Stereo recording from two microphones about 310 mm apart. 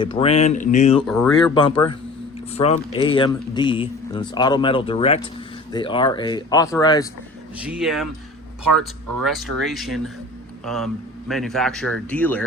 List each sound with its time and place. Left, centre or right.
0.0 s speech: centre
1.0 s a man's voice: centre
1.5 s speech: centre
7.6 s a man's voice: centre